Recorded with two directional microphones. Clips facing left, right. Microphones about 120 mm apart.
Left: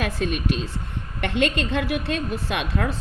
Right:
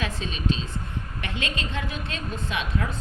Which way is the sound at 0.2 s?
60° left (ahead or behind).